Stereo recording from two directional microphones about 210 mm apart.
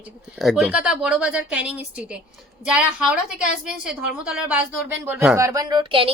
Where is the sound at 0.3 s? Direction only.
Centre (ahead or behind).